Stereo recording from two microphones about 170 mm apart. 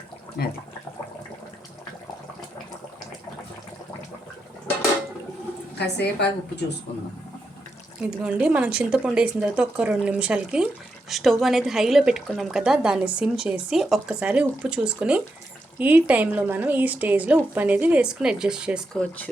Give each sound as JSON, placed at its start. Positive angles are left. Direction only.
{"t": 0.4, "sound": "speech", "side_deg": 65}
{"t": 5.7, "sound": "a woman's voice", "side_deg": 80}
{"t": 8.0, "sound": "a woman's voice", "side_deg": -5}